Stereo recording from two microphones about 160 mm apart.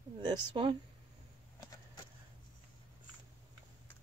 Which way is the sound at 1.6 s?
25° left (ahead or behind).